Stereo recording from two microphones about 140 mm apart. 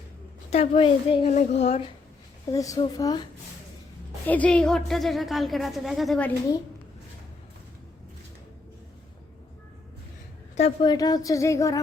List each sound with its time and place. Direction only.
0.5 s a woman's voice: 50° left (ahead or behind)
2.5 s speech: 25° left (ahead or behind)
4.3 s a woman's voice: 10° left (ahead or behind)
10.6 s a woman's voice: 40° left (ahead or behind)
10.9 s speech: 25° left (ahead or behind)